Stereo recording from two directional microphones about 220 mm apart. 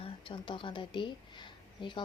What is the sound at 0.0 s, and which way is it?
Speech, 25° left (ahead or behind).